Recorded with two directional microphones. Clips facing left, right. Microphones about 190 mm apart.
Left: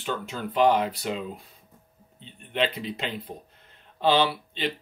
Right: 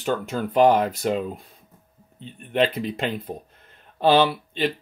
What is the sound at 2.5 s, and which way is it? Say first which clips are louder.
Speech: right 5 dB; 45° right (ahead or behind).